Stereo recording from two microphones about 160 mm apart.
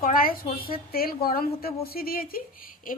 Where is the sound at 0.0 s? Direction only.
60° left (ahead or behind).